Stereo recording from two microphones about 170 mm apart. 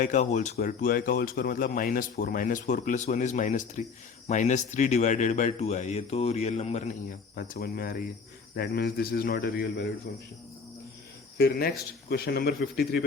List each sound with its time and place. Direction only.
0.0 s speech: 45° left (ahead or behind)
0.6 s speech: 55° left (ahead or behind); by 6.9 s 40° left (ahead or behind)
7.3 s speech: 55° left (ahead or behind)
11.3 s a man's voice: 65° left (ahead or behind)